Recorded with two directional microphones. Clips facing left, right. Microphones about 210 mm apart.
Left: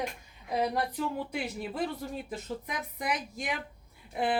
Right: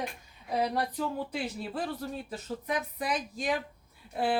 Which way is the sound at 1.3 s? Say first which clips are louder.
Even; 15° left (ahead or behind).